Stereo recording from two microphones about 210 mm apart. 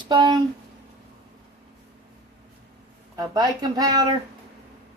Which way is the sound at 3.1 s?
20° right (ahead or behind).